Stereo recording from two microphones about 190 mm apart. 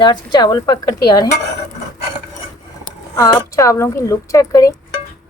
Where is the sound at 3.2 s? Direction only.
15° left (ahead or behind).